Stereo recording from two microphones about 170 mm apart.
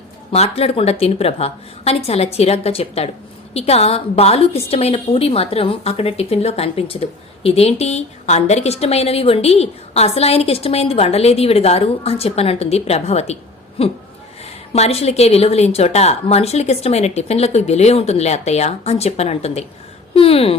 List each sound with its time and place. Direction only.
0.3 s a woman's voice: 35° left (ahead or behind)